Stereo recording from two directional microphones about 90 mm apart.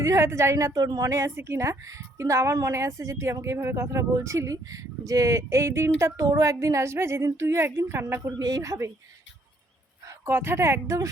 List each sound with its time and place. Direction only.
0.0 s speech: 35° right (ahead or behind)
8.3 s a woman's voice: 45° right (ahead or behind)
10.1 s speech: 30° right (ahead or behind)